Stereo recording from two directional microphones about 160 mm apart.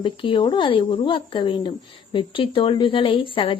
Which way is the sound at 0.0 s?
30° left (ahead or behind).